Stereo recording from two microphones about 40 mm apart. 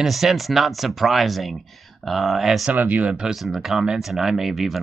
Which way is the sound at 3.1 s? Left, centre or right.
Centre.